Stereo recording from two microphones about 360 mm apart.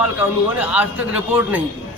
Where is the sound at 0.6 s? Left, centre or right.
Centre.